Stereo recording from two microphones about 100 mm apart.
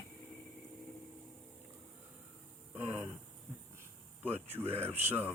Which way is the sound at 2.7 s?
15° right (ahead or behind).